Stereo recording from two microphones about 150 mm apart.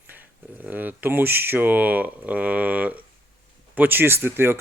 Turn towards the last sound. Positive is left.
turn(degrees=-15)  # may be behind; listen again after turning